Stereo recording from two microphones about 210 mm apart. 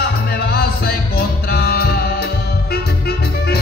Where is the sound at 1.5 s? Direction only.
45° left (ahead or behind).